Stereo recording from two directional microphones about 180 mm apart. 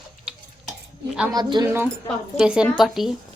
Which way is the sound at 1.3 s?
25° right (ahead or behind).